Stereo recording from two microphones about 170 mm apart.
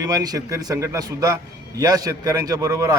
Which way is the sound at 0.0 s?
20° right (ahead or behind).